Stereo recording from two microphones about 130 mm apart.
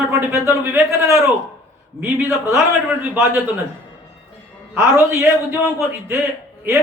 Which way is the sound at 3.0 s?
15° right (ahead or behind).